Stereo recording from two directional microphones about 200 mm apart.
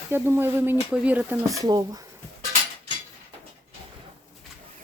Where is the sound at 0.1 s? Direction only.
10° right (ahead or behind).